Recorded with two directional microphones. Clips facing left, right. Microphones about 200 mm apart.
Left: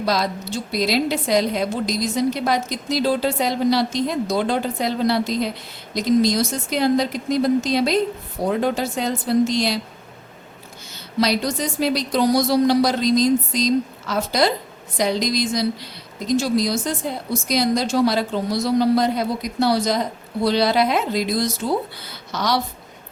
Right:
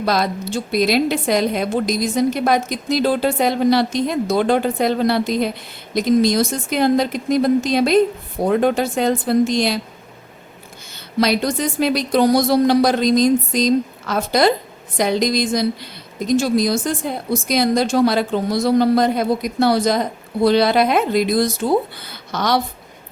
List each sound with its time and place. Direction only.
0.0 s a woman's voice: 55° right (ahead or behind)
11.2 s a woman's voice: 55° right (ahead or behind)